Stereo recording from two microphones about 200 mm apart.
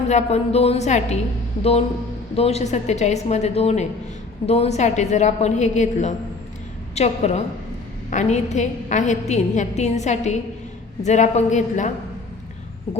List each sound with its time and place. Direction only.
0.1 s a woman's voice: 35° left (ahead or behind)
2.3 s a woman's voice: 30° left (ahead or behind)